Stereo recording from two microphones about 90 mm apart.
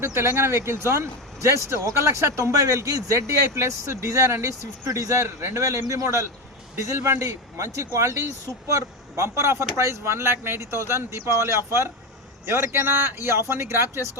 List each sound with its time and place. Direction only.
0.0 s speech: 25° right (ahead or behind)